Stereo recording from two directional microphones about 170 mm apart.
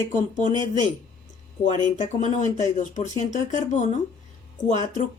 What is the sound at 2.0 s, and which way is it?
Speech, 45° left (ahead or behind).